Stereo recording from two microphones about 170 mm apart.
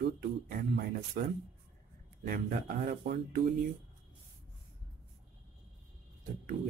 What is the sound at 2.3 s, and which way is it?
Speech, 60° right (ahead or behind).